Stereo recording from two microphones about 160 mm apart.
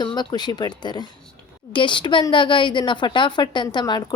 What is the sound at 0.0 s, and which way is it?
A woman's voice, 25° left (ahead or behind).